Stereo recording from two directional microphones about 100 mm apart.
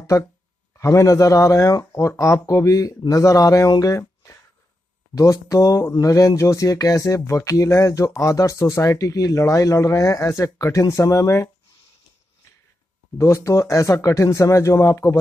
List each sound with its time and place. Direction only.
0.7 s speech: 30° left (ahead or behind)
13.2 s speech: 30° left (ahead or behind)